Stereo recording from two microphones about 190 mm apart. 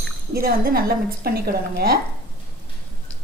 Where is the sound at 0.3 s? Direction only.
50° right (ahead or behind).